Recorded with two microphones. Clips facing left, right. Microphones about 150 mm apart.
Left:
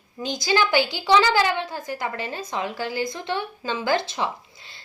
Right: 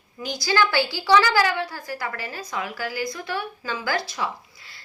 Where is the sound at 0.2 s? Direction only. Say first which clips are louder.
Even; 20° left (ahead or behind).